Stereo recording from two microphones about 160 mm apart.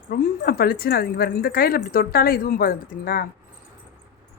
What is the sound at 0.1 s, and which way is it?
Speech, 70° left (ahead or behind).